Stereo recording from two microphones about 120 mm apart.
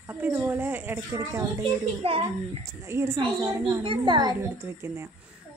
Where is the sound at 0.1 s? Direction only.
20° right (ahead or behind).